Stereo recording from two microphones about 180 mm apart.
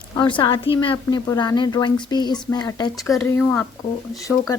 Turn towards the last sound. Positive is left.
turn(degrees=20)  # may be behind; listen again after turning